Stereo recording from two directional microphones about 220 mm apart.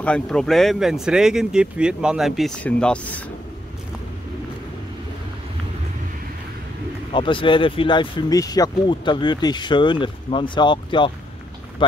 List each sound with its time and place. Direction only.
0.0 s speech: 5° left (ahead or behind)
7.1 s speech: 25° left (ahead or behind)